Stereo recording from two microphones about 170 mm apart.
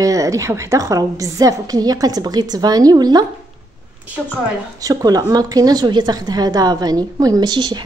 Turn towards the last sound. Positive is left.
turn(degrees=-25)  # may be behind; listen again after turning